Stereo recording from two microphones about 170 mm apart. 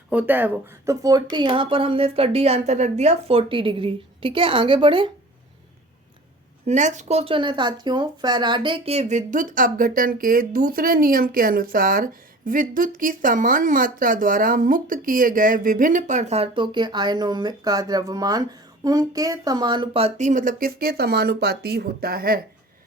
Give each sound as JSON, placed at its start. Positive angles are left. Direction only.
{"t": 0.1, "sound": "speech", "side_deg": -10}
{"t": 6.7, "sound": "speech", "side_deg": -45}